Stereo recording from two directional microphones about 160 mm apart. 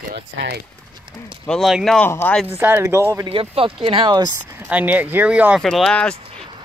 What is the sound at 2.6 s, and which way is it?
Speech, 15° right (ahead or behind).